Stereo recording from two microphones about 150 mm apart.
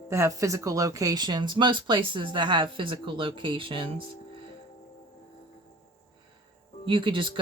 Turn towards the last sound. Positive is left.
turn(degrees=-35)  # may be behind; listen again after turning